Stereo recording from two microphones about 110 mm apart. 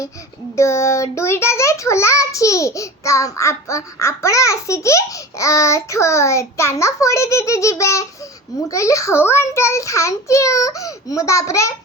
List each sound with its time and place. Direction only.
0.5 s a child's voice: 25° left (ahead or behind)